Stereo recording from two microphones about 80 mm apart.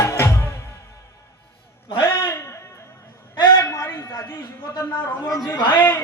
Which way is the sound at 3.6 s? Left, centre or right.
Left.